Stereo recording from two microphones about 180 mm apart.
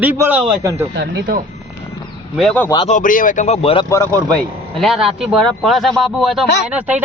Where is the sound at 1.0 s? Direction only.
65° right (ahead or behind).